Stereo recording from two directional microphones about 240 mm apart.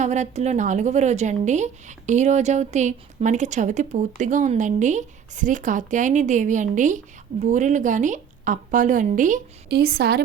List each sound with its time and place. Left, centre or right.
0.0 s a woman's voice: right